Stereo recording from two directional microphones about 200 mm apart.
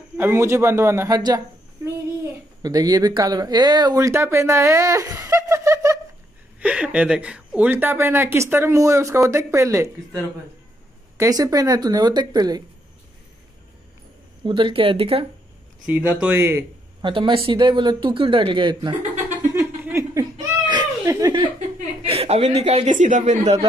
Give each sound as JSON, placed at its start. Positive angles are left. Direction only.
{"t": 0.2, "sound": "a woman's voice", "side_deg": -15}
{"t": 2.6, "sound": "a woman's voice", "side_deg": -20}
{"t": 14.4, "sound": "speech", "side_deg": -25}
{"t": 15.9, "sound": "a woman's voice", "side_deg": -5}
{"t": 17.0, "sound": "speech", "side_deg": -25}
{"t": 19.5, "sound": "a sound", "side_deg": -15}
{"t": 21.5, "sound": "a woman's voice", "side_deg": -35}